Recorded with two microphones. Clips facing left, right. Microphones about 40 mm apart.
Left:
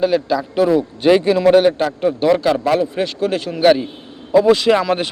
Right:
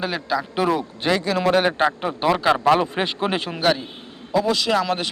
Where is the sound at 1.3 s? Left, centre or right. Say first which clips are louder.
Left 5 dB; centre.